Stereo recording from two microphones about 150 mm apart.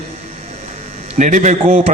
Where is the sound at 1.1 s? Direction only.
55° right (ahead or behind).